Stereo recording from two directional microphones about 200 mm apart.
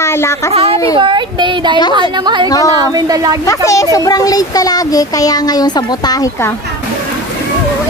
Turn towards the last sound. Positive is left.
turn(degrees=15)  # may be behind; listen again after turning